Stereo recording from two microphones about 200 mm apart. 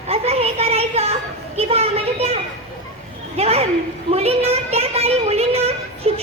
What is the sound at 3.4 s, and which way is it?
A woman's voice, 30° right (ahead or behind).